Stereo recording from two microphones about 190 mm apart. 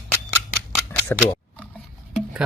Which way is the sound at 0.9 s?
10° left (ahead or behind).